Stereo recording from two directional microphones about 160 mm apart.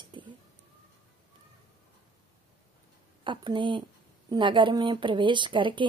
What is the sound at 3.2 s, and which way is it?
A woman's voice, 30° right (ahead or behind).